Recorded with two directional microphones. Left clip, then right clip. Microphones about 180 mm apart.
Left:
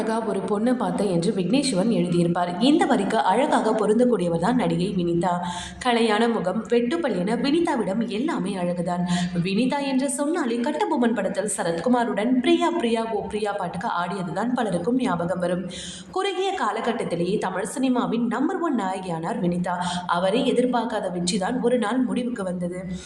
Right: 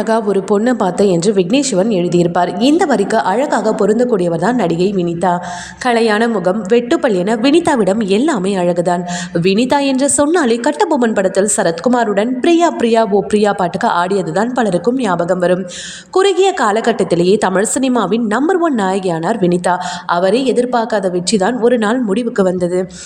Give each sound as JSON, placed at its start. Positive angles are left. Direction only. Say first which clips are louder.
{"t": 0.1, "sound": "a woman's voice", "louder": "right 16 dB", "side_deg": -35}